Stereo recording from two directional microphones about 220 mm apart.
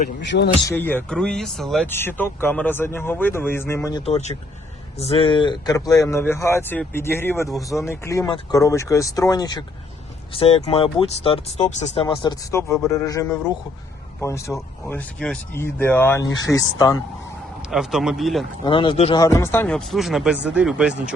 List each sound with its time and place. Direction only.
0.2 s a man's voice: 50° left (ahead or behind)
0.7 s speech: 10° left (ahead or behind)
4.0 s speech: 30° left (ahead or behind)
17.7 s speech: centre (ahead or behind)
18.6 s speech: 25° left (ahead or behind)
19.2 s speech: 15° left (ahead or behind); by 20.9 s 5° right (ahead or behind)